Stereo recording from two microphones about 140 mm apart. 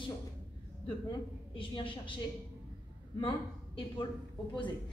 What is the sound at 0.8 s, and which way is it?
A woman's voice, 35° left (ahead or behind).